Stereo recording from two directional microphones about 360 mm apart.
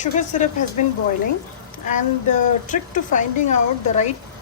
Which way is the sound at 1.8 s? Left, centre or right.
Left.